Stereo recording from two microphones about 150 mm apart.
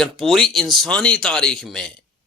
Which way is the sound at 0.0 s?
Centre (ahead or behind).